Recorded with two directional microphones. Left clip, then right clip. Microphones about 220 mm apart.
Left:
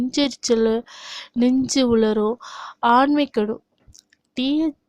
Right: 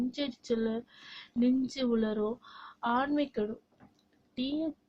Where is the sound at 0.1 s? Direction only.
45° left (ahead or behind).